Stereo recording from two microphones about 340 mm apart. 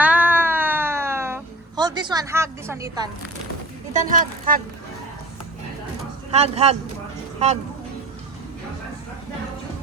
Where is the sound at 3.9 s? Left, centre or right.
Right.